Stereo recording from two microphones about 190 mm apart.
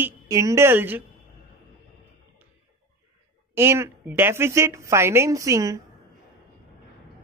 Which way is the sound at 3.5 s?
15° right (ahead or behind).